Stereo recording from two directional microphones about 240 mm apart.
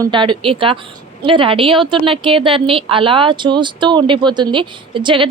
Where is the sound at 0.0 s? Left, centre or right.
Centre.